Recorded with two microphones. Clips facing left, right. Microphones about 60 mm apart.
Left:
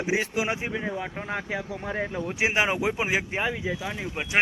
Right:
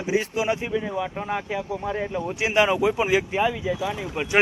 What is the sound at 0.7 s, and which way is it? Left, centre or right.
Speech, left.